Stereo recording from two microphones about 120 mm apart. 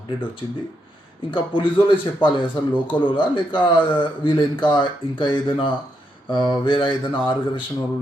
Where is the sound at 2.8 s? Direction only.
45° left (ahead or behind).